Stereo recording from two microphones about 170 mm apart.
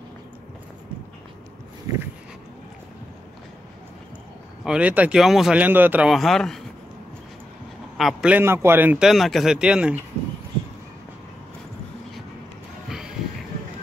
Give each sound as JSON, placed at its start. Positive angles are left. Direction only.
{"t": 1.9, "sound": "dog", "side_deg": -20}
{"t": 4.6, "sound": "speech", "side_deg": -10}
{"t": 8.0, "sound": "speech", "side_deg": 0}